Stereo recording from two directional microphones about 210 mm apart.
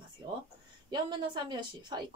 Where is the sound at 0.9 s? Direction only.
20° right (ahead or behind).